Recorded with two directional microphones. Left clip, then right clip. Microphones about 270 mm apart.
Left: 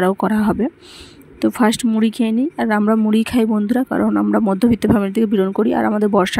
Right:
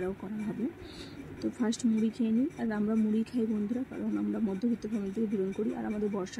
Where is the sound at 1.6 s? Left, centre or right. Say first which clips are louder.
Left 13 dB; left.